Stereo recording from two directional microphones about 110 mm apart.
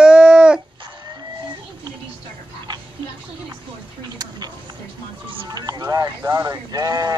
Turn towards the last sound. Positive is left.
turn(degrees=-35)  # may be behind; listen again after turning